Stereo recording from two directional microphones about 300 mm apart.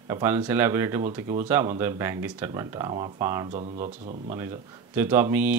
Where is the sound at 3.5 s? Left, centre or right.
Right.